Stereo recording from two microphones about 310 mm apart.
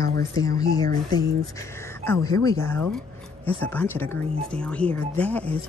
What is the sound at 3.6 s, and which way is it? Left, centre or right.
Speech, centre.